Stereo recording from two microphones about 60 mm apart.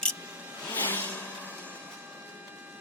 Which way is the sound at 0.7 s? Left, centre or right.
Left.